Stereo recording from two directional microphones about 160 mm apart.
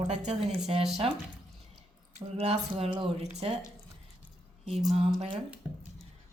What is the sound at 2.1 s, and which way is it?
Speech, 40° right (ahead or behind).